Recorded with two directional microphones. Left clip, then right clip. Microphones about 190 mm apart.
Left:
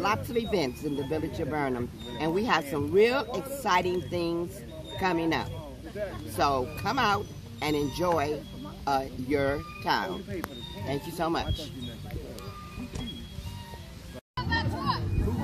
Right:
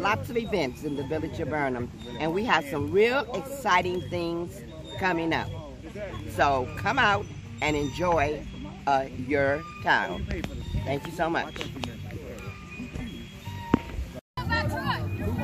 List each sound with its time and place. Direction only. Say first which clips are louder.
0.0 s speech: right 1 dB; 5° left (ahead or behind)
14.3 s music: right 2 dB; 20° right (ahead or behind)